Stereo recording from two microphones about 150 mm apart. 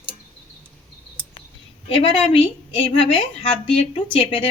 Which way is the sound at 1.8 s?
40° left (ahead or behind).